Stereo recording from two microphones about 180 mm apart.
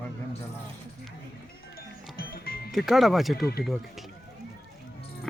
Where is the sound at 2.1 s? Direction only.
55° left (ahead or behind).